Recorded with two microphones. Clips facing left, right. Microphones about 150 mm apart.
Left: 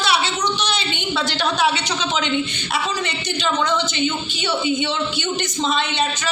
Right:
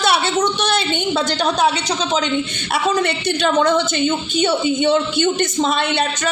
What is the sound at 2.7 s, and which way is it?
A woman's voice, 55° right (ahead or behind).